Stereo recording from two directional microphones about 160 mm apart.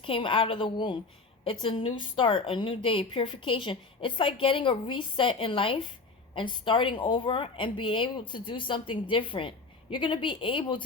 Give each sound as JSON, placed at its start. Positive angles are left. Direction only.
{"t": 0.0, "sound": "a woman's voice", "side_deg": 35}